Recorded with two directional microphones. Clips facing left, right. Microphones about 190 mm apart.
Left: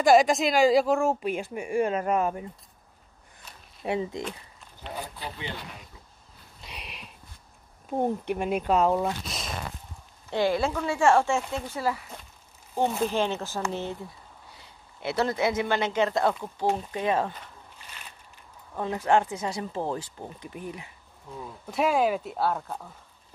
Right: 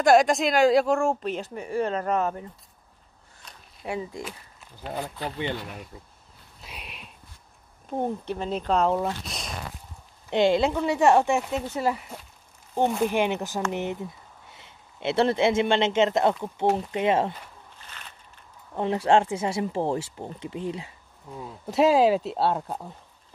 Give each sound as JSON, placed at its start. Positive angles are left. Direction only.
{"t": 0.0, "sound": "a woman's voice", "side_deg": 0}
{"t": 3.4, "sound": "a sound", "side_deg": 5}
{"t": 3.8, "sound": "speech", "side_deg": 25}
{"t": 6.6, "sound": "a sound", "side_deg": 0}
{"t": 7.9, "sound": "speech", "side_deg": 15}
{"t": 10.3, "sound": "a man's voice", "side_deg": -20}
{"t": 18.8, "sound": "speech", "side_deg": -25}
{"t": 21.7, "sound": "speech", "side_deg": -90}
{"t": 22.3, "sound": "speech", "side_deg": -25}